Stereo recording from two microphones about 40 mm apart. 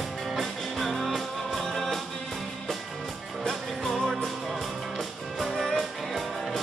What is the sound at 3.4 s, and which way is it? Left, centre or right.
Music, centre.